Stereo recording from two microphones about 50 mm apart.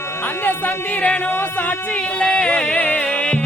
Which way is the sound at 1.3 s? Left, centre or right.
Left.